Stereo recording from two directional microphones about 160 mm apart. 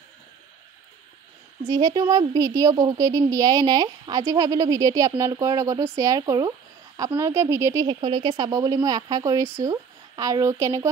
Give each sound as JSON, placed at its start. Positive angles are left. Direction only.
{"t": 1.7, "sound": "speech", "side_deg": -25}